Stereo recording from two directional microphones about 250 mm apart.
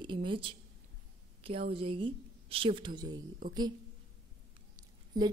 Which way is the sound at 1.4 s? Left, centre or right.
Right.